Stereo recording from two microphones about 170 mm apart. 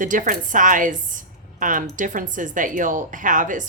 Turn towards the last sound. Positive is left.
turn(degrees=-50)  # may be behind; listen again after turning